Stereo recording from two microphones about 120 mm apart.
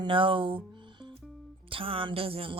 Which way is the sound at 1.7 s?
50° right (ahead or behind).